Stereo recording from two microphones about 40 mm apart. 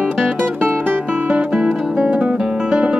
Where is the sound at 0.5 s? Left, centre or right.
Right.